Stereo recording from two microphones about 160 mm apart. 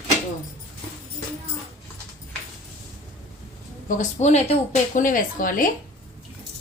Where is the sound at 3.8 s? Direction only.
50° left (ahead or behind).